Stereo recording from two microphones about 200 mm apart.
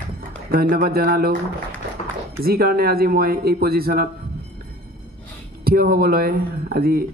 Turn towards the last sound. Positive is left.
turn(degrees=-50)  # may be behind; listen again after turning